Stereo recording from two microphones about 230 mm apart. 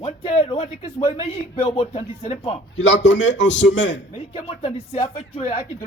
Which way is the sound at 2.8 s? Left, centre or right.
Left.